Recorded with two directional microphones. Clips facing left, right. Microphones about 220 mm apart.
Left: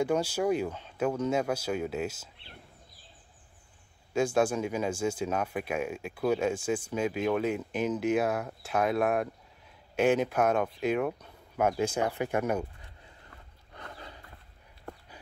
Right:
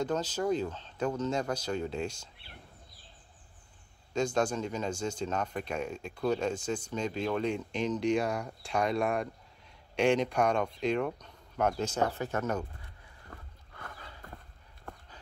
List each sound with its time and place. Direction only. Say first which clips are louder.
0.0 s speech: left 4 dB; 10° left (ahead or behind)
4.1 s speech: left 3 dB; 5° left (ahead or behind)
13.3 s wild animals: right 8 dB; 45° right (ahead or behind)
13.7 s horse: left 2 dB; 25° left (ahead or behind)